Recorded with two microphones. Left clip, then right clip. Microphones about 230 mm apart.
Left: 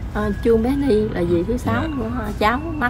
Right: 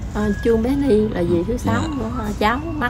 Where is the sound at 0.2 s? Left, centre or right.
Centre.